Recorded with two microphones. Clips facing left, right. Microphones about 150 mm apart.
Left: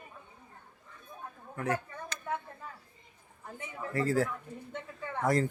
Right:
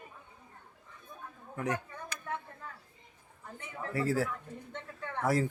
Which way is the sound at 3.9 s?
5° right (ahead or behind).